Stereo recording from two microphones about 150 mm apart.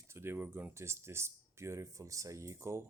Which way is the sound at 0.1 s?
15° right (ahead or behind).